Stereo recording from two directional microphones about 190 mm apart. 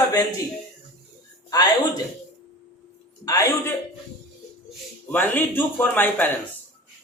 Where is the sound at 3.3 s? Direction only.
15° left (ahead or behind).